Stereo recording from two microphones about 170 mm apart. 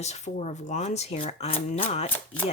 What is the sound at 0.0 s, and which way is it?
Speech, 40° left (ahead or behind).